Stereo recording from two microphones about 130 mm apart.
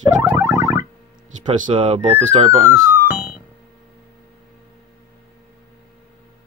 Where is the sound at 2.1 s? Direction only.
60° right (ahead or behind).